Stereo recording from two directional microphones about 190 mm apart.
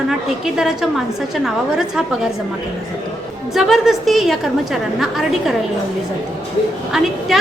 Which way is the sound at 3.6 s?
Centre (ahead or behind).